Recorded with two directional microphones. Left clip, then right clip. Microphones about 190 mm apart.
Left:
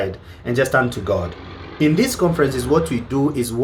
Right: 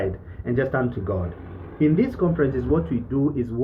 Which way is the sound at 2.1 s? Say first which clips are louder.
Left 5 dB; 30° left (ahead or behind).